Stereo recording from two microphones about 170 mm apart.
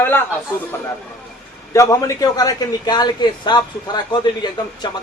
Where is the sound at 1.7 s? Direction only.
20° left (ahead or behind).